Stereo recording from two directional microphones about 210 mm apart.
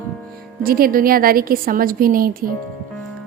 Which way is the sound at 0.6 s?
45° right (ahead or behind).